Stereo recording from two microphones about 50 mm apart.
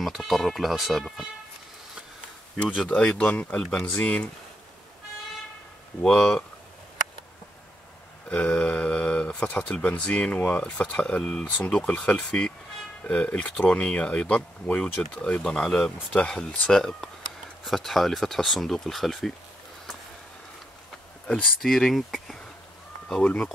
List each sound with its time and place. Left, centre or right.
0.0 s speech: centre
2.9 s speech: left
6.0 s speech: centre
8.3 s speech: centre
16.2 s speech: centre
21.5 s speech: centre
23.2 s speech: left